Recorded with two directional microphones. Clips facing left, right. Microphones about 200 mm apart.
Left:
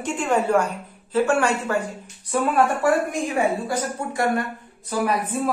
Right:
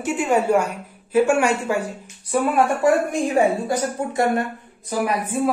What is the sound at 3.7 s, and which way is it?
Speech, 25° right (ahead or behind).